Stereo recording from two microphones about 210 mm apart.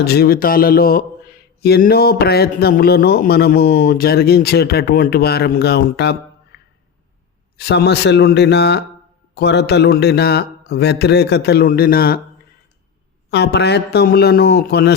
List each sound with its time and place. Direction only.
0.0 s a man's voice: 50° left (ahead or behind)
13.3 s a man's voice: 55° left (ahead or behind)